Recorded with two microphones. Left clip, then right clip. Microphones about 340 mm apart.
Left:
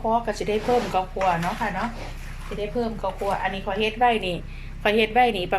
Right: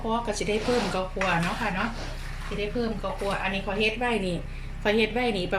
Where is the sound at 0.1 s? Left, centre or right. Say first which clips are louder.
Left 3 dB; left.